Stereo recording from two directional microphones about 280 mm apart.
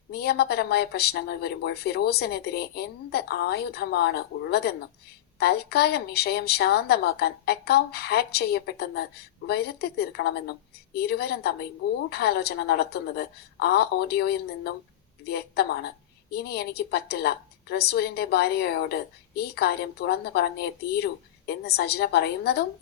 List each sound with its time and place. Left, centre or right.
0.1 s a woman's voice: left